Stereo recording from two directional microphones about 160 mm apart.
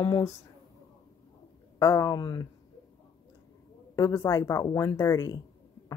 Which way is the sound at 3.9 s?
20° left (ahead or behind).